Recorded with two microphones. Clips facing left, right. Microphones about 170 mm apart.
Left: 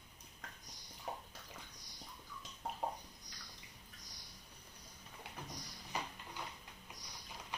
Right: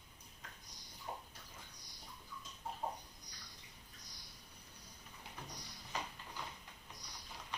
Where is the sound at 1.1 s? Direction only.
75° left (ahead or behind).